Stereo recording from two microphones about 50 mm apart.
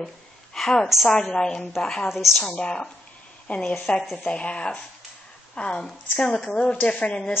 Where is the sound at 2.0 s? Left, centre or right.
Centre.